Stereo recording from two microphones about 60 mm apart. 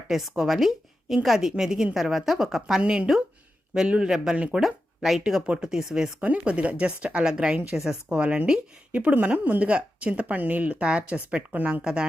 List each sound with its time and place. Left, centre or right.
0.1 s a woman's voice: centre
2.8 s speech: centre
5.2 s speech: centre
6.1 s speech: right
8.9 s speech: right